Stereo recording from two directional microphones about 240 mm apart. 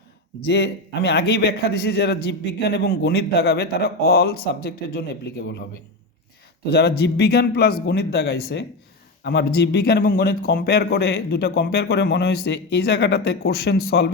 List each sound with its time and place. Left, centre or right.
0.4 s a man's voice: left
6.7 s speech: left